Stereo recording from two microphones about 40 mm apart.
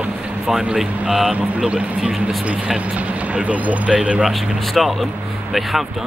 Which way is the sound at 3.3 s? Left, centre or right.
Right.